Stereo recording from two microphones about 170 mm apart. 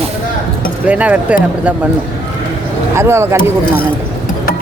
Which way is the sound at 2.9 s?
15° right (ahead or behind).